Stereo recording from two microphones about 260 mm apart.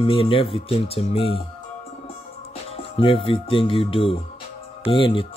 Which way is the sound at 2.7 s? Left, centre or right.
Left.